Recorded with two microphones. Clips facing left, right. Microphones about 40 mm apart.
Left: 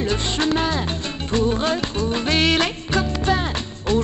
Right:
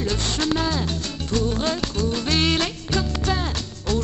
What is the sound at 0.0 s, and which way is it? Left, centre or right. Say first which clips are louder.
Music: left 3 dB; left.